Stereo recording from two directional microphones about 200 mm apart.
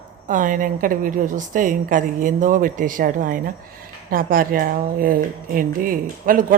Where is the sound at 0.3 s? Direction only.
40° right (ahead or behind).